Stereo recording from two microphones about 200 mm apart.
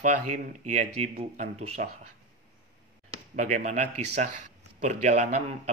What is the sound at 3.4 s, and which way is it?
Speech, 35° right (ahead or behind).